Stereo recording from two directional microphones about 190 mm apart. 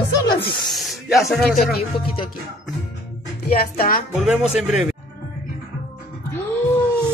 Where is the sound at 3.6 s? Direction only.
50° left (ahead or behind).